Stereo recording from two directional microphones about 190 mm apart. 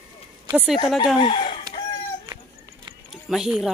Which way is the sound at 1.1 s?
25° left (ahead or behind).